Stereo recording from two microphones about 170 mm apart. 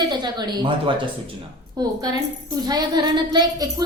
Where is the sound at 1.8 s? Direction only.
25° right (ahead or behind).